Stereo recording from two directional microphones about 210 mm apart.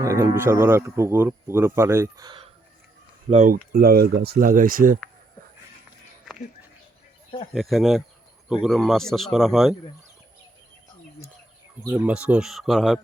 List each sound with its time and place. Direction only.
0.0 s speech: 15° right (ahead or behind)
3.2 s speech: 35° right (ahead or behind)
7.5 s speech: centre (ahead or behind)
11.9 s speech: 5° right (ahead or behind)